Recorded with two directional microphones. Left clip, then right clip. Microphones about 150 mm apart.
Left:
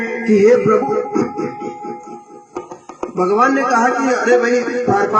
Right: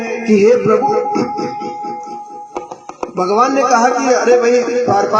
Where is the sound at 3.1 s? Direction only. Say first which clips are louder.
Right 1 dB; 60° right (ahead or behind).